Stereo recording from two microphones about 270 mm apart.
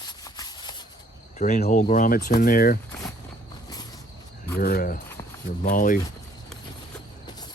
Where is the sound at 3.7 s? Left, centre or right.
Centre.